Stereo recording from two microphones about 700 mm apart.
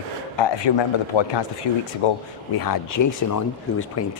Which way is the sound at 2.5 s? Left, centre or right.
Left.